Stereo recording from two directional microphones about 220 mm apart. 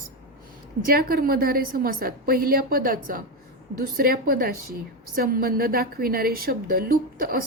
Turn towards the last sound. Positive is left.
turn(degrees=-40)  # may be behind; listen again after turning